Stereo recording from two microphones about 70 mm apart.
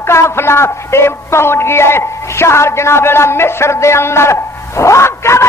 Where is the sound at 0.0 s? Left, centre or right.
Left.